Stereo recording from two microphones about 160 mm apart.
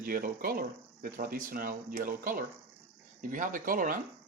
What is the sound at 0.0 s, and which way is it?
Speech, 65° right (ahead or behind).